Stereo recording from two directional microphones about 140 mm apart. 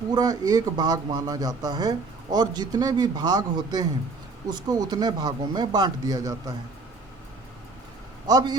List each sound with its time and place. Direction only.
0.1 s speech: 30° right (ahead or behind)
8.3 s speech: 30° right (ahead or behind)